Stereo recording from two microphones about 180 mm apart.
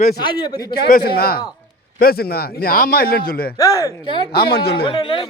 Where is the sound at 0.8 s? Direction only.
60° left (ahead or behind).